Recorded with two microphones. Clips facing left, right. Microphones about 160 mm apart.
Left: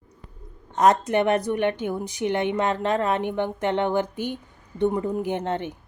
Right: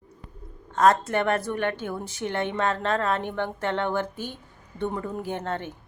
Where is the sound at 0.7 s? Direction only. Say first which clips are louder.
Left 1 dB; 20° left (ahead or behind).